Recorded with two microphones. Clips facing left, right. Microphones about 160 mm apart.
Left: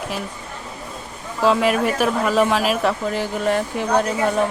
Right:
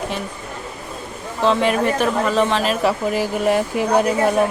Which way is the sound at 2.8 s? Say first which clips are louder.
Right 2 dB; 10° right (ahead or behind).